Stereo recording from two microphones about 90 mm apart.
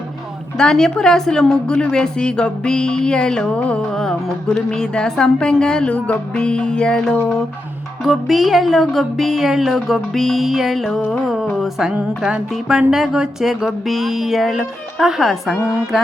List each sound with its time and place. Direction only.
0.5 s a woman's voice: 5° left (ahead or behind)
11.5 s music: 5° right (ahead or behind)
12.9 s speech: 5° right (ahead or behind)